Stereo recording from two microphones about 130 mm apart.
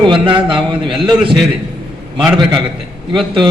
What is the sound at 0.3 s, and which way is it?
A man's voice, 40° right (ahead or behind).